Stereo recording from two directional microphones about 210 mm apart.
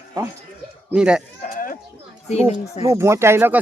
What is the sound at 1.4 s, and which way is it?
Sheep, 40° left (ahead or behind).